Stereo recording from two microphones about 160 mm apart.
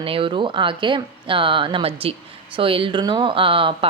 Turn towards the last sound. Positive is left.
turn(degrees=-35)  # may be behind; listen again after turning